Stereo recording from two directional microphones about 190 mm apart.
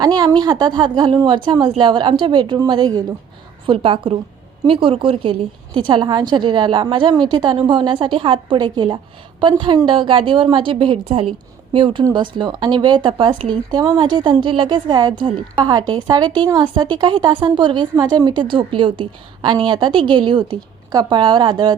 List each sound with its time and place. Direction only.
0.0 s a woman's voice: 20° right (ahead or behind)